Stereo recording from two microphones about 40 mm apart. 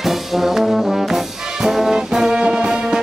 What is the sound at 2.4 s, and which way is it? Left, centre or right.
Music, right.